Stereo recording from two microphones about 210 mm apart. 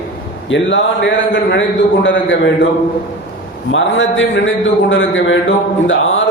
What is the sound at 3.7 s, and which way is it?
A man's voice, 65° left (ahead or behind).